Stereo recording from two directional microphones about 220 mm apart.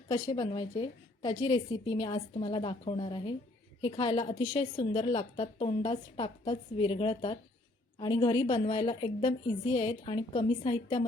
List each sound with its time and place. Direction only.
0.1 s a woman's voice: 20° left (ahead or behind)